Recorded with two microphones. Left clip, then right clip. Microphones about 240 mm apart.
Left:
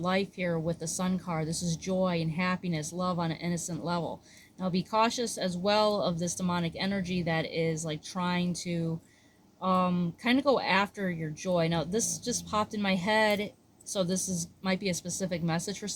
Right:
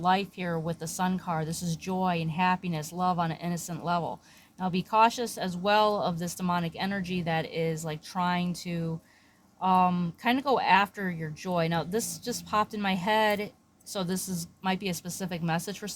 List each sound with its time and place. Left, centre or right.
0.0 s speech: right